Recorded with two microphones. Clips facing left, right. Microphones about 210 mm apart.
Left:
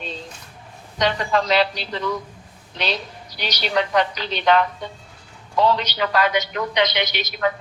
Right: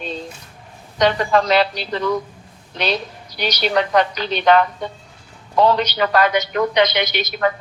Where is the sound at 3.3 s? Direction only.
50° right (ahead or behind).